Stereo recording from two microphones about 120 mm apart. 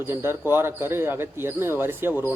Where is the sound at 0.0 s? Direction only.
20° right (ahead or behind).